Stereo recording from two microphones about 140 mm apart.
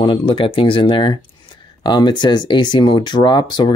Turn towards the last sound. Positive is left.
turn(degrees=30)  # may be behind; listen again after turning